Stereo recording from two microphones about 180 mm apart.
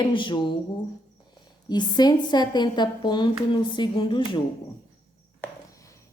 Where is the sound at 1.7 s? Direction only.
25° left (ahead or behind).